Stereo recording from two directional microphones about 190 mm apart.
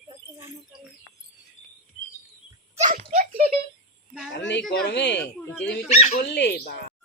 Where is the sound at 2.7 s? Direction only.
35° right (ahead or behind).